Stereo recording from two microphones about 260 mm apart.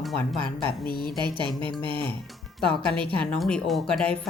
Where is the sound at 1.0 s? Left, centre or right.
Centre.